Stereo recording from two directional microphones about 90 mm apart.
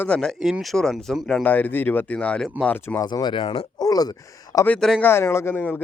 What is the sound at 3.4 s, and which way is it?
Speech, 90° left.